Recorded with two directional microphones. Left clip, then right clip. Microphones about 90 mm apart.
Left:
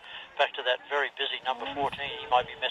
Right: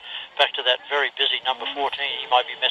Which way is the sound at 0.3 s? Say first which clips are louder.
Right 7 dB; 20° right (ahead or behind).